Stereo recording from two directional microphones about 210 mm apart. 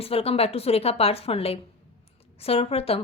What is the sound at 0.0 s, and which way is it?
A woman's voice, 25° left (ahead or behind).